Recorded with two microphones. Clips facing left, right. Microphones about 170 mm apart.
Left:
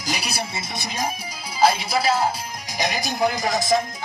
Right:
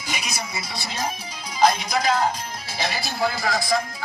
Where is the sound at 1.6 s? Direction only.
5° left (ahead or behind).